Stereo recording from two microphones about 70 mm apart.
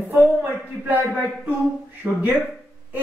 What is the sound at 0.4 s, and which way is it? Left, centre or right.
A man's voice, right.